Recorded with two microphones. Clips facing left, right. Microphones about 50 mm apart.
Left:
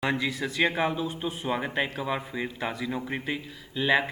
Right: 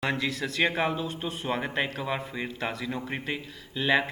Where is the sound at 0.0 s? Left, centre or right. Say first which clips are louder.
Left 1 dB; centre.